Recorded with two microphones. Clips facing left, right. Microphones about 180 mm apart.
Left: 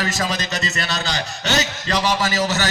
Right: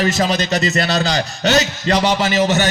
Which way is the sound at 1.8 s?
20° right (ahead or behind).